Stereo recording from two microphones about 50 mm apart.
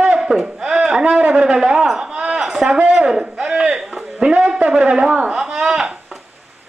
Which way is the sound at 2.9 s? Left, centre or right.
Centre.